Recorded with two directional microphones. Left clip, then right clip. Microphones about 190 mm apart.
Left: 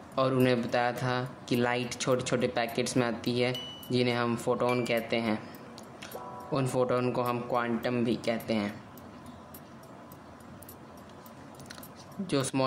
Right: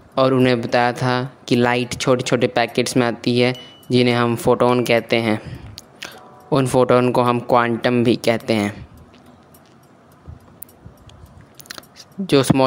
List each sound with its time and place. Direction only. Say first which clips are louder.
0.1 s speech: right 11 dB; 45° right (ahead or behind)
11.7 s a sound: right 14 dB; 50° right (ahead or behind)
12.3 s speech: right 14 dB; 45° right (ahead or behind)